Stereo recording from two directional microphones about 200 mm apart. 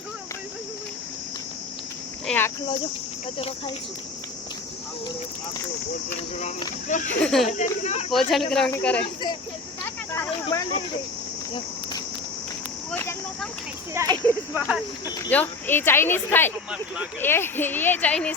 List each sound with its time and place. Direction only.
2.2 s speech: 10° left (ahead or behind)
6.8 s speech: 40° left (ahead or behind)
7.2 s speech: 5° left (ahead or behind)
7.4 s speech: 35° left (ahead or behind)
8.1 s speech: centre (ahead or behind)
10.4 s speech: 20° left (ahead or behind)
12.9 s speech: 10° left (ahead or behind)